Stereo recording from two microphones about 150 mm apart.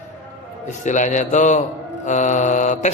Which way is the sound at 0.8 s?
55° left (ahead or behind).